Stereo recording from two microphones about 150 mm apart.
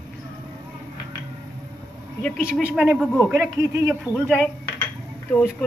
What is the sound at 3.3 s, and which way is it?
Speech, 15° right (ahead or behind).